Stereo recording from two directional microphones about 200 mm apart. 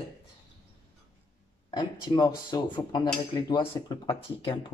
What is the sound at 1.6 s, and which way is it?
Speech, 20° left (ahead or behind).